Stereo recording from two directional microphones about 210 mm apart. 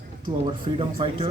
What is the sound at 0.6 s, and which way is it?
Speech, 25° right (ahead or behind).